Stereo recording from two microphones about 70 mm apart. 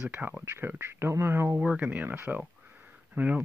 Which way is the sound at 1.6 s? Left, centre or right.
Right.